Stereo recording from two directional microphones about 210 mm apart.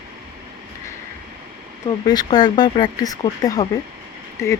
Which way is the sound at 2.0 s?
20° left (ahead or behind).